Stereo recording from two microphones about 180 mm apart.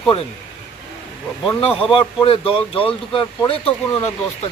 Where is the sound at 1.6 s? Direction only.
30° left (ahead or behind).